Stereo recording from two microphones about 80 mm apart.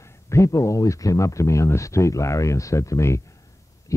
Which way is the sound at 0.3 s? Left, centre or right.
Left.